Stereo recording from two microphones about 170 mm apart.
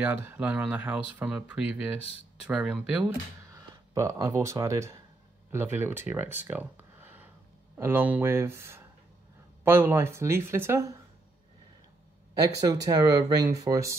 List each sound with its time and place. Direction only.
0.0 s speech: 10° right (ahead or behind)
3.5 s speech: 20° right (ahead or behind)
12.5 s speech: 20° right (ahead or behind)